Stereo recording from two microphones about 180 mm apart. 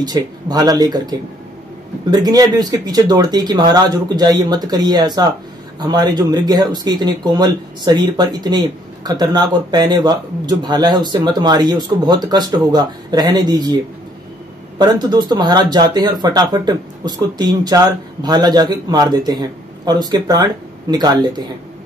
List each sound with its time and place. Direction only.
0.0 s speech: 20° right (ahead or behind)
14.8 s speech: 20° right (ahead or behind)